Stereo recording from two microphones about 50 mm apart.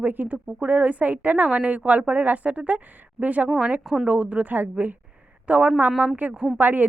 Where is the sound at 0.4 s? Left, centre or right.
Right.